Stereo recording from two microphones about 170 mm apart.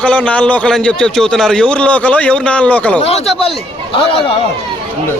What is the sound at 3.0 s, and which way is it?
A man's voice, 35° left (ahead or behind).